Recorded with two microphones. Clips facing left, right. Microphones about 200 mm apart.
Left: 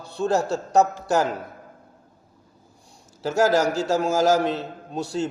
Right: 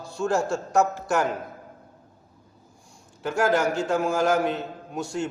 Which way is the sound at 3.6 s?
85° left.